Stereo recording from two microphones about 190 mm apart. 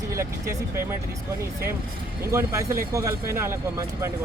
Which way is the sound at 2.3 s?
15° right (ahead or behind).